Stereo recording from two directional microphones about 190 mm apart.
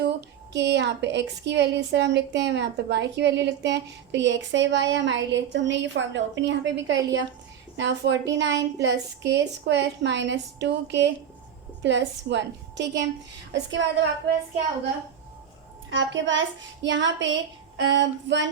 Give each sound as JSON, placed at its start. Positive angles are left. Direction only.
{"t": 0.0, "sound": "speech", "side_deg": -65}
{"t": 15.9, "sound": "speech", "side_deg": -70}